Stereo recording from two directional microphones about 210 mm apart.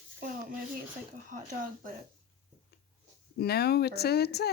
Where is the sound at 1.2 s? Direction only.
40° right (ahead or behind).